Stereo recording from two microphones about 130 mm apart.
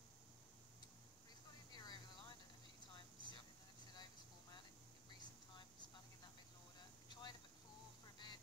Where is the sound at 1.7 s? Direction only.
35° left (ahead or behind).